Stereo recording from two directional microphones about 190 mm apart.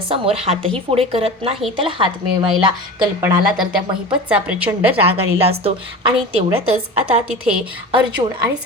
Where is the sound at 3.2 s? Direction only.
5° right (ahead or behind).